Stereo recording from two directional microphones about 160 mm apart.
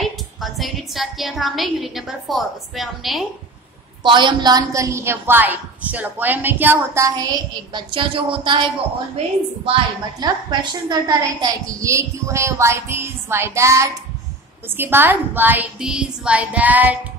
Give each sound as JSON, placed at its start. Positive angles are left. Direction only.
{"t": 0.0, "sound": "a woman's voice", "side_deg": 0}
{"t": 4.0, "sound": "a woman's voice", "side_deg": -30}
{"t": 10.2, "sound": "a woman's voice", "side_deg": -25}